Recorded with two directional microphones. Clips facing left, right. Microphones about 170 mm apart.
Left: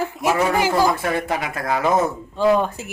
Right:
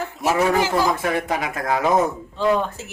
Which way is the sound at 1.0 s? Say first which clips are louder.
Even; 20° right (ahead or behind).